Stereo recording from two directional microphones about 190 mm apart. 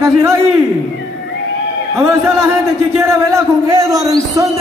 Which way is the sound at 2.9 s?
15° right (ahead or behind).